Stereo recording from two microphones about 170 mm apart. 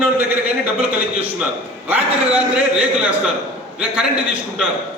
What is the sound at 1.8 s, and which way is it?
A man's voice, 10° right (ahead or behind).